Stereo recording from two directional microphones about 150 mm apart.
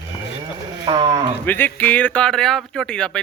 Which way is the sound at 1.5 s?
10° left (ahead or behind).